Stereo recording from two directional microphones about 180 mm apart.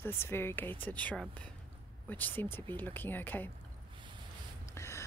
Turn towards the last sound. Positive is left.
turn(degrees=15)  # may be behind; listen again after turning